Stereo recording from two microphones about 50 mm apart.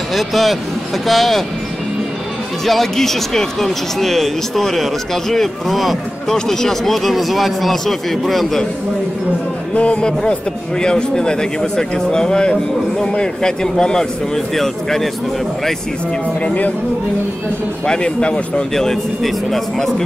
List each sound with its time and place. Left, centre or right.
0.1 s speech: centre
2.6 s speech: centre
9.8 s speech: left; by 15.0 s centre
16.4 s speech: left
17.8 s speech: centre
18.8 s speech: centre